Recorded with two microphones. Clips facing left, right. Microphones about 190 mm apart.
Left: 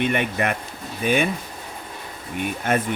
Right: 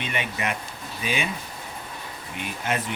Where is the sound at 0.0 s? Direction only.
55° left (ahead or behind).